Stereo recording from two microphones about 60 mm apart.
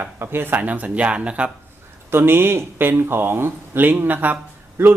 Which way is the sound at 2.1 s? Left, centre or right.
Right.